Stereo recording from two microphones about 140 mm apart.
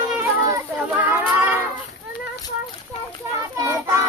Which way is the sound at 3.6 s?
20° right (ahead or behind).